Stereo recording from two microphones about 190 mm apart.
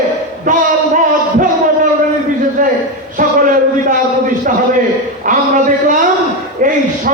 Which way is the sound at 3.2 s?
45° right (ahead or behind).